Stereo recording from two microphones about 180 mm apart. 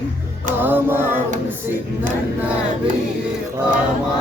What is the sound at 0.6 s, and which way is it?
Music, 10° right (ahead or behind).